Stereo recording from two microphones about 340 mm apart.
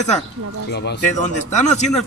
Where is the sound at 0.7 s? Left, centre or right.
Left.